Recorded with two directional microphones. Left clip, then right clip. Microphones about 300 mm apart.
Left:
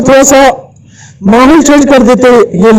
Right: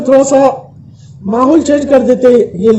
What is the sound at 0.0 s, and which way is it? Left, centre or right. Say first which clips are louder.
A man's voice: left 4 dB; left.